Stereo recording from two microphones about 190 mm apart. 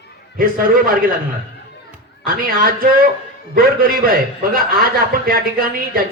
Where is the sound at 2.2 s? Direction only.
50° right (ahead or behind).